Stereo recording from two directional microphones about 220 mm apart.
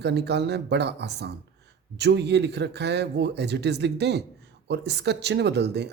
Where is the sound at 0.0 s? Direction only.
50° right (ahead or behind).